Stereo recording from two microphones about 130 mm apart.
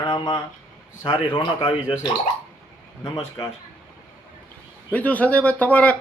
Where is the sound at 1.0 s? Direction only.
35° left (ahead or behind).